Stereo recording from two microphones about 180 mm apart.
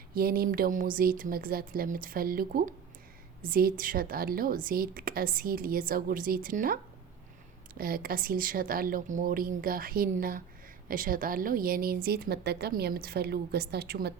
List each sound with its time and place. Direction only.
0.1 s a woman's voice: 55° right (ahead or behind)
7.8 s a woman's voice: 55° right (ahead or behind)